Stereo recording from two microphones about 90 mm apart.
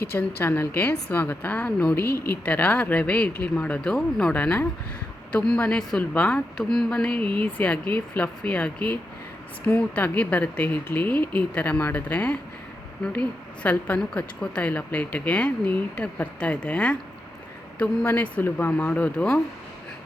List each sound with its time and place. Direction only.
0.1 s a woman's voice: 25° left (ahead or behind)